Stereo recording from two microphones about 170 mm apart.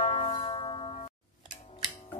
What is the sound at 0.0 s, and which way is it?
Music, 40° left (ahead or behind).